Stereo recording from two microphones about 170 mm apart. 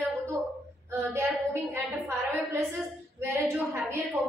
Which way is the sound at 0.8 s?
15° right (ahead or behind).